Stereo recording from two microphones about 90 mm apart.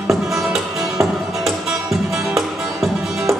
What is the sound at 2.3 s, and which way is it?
Music, centre (ahead or behind).